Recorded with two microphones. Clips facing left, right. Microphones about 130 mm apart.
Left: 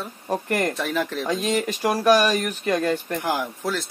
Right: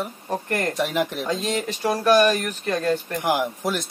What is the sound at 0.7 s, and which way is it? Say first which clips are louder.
Speech: right 2 dB; 15° right (ahead or behind).